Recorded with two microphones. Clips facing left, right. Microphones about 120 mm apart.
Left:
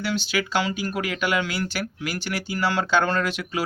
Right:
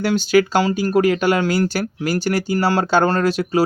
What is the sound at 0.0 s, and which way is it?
Speech, 45° right (ahead or behind).